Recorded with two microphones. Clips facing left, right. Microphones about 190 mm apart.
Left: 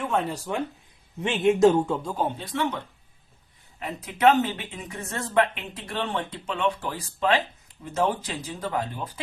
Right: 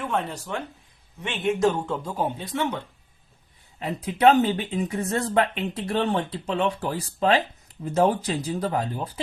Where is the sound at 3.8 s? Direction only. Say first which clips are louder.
Right 2 dB; 30° right (ahead or behind).